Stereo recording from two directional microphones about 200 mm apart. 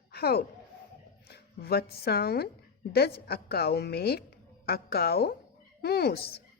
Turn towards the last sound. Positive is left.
turn(degrees=50)  # may be behind; listen again after turning